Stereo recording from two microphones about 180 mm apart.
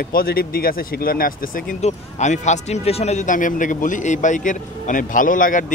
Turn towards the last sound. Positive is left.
turn(degrees=50)  # may be behind; listen again after turning